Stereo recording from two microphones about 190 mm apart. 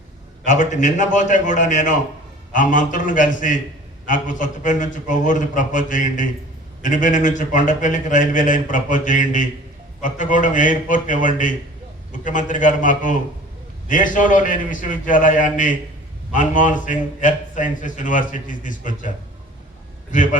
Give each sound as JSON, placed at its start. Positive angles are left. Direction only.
{"t": 0.4, "sound": "a man's voice", "side_deg": 40}
{"t": 20.1, "sound": "a man's voice", "side_deg": 45}